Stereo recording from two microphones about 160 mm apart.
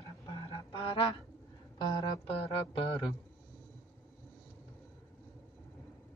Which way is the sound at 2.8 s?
35° left (ahead or behind).